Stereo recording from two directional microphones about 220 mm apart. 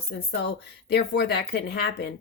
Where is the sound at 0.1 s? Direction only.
50° left (ahead or behind).